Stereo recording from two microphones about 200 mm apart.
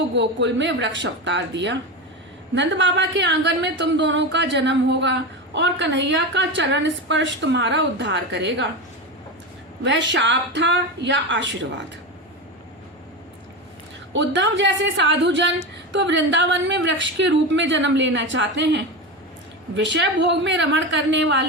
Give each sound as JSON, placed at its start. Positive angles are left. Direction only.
{"t": 0.2, "sound": "a woman's voice", "side_deg": -65}
{"t": 9.8, "sound": "a woman's voice", "side_deg": -65}
{"t": 14.1, "sound": "a woman's voice", "side_deg": -65}